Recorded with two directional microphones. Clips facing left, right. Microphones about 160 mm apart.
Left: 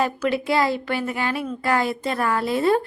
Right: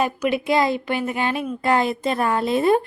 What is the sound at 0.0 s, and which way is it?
Speech, 15° right (ahead or behind).